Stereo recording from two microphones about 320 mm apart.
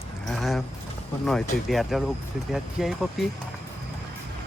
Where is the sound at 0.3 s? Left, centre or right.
Centre.